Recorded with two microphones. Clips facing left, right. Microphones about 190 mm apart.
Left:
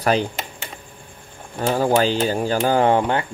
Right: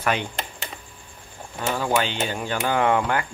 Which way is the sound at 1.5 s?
40° left (ahead or behind).